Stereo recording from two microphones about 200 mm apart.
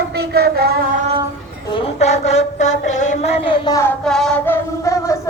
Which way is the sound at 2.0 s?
35° left (ahead or behind).